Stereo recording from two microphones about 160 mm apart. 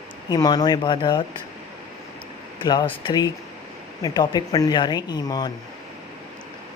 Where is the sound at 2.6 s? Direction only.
25° left (ahead or behind).